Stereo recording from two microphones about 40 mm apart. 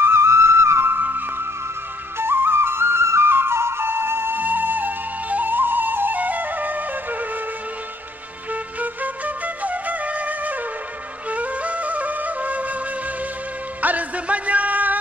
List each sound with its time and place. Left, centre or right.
0.0 s music: right
2.1 s flute: right
4.4 s flute: right
8.7 s flute: right
13.7 s music: right